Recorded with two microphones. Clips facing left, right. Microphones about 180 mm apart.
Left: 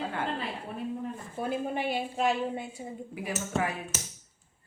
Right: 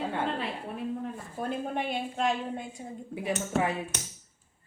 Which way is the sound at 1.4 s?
5° left (ahead or behind).